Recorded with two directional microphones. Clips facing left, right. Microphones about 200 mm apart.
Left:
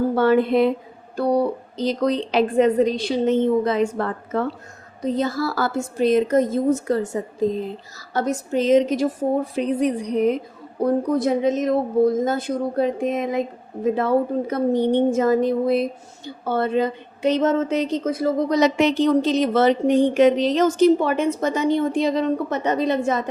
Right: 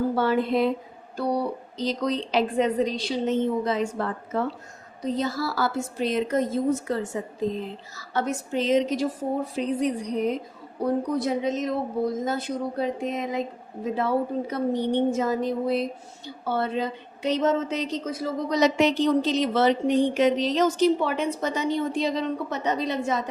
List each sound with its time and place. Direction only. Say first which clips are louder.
0.2 s a woman's voice: left 8 dB; 55° left (ahead or behind)
9.6 s a woman's voice: left 4 dB; 60° left (ahead or behind)